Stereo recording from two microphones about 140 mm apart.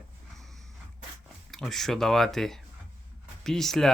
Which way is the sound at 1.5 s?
Centre (ahead or behind).